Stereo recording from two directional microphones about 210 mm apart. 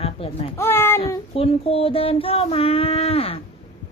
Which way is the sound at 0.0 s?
30° left (ahead or behind).